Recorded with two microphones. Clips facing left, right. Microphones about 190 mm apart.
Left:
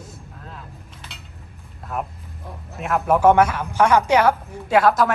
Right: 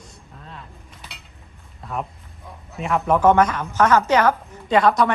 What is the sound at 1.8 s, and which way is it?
A woman's voice, centre (ahead or behind).